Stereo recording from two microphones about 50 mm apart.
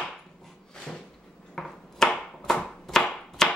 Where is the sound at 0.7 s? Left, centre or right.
Centre.